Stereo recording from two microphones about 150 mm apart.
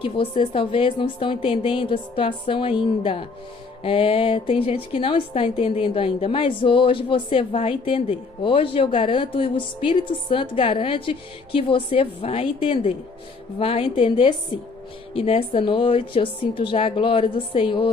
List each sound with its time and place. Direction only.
0.0 s a woman's voice: 35° left (ahead or behind)